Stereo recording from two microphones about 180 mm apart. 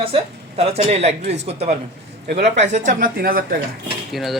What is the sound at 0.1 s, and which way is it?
A woman's voice, 35° right (ahead or behind).